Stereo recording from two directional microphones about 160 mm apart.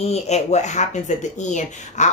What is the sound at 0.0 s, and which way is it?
Speech, 45° left (ahead or behind).